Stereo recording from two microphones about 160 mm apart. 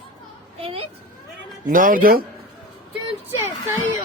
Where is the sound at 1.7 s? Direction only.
60° right (ahead or behind).